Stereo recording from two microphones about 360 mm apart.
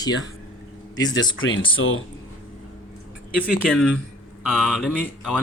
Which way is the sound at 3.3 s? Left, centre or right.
Centre.